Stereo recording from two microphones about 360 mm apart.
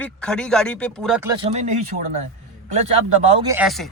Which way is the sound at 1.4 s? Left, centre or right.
Centre.